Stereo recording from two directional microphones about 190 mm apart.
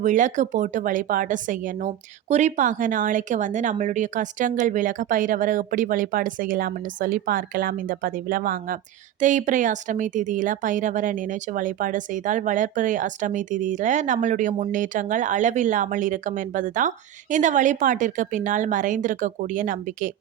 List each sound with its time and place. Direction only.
0.0 s speech: 40° right (ahead or behind)